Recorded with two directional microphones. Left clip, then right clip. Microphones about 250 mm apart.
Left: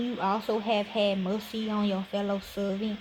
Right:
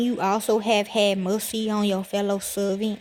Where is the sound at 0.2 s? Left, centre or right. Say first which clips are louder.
Right 5 dB; right.